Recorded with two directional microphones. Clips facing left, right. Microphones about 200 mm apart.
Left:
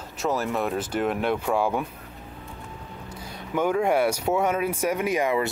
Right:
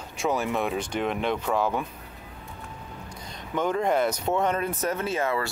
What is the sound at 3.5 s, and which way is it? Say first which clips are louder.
Speech: left 2 dB; 10° left (ahead or behind).